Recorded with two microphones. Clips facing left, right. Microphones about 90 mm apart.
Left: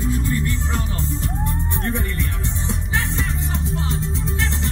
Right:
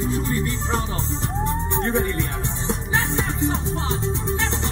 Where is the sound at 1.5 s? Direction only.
25° right (ahead or behind).